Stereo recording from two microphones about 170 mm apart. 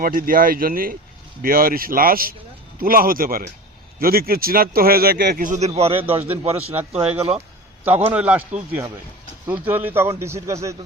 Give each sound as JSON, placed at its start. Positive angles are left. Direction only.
{"t": 0.0, "sound": "speech", "side_deg": -55}
{"t": 5.5, "sound": "speech", "side_deg": -40}
{"t": 7.9, "sound": "speech", "side_deg": -10}
{"t": 9.5, "sound": "speech", "side_deg": -10}